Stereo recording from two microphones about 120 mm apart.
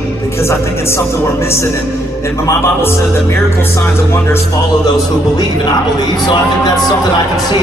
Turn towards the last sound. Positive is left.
turn(degrees=30)  # may be behind; listen again after turning